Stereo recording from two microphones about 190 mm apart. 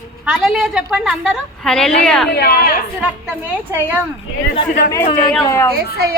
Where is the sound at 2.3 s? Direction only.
55° left (ahead or behind).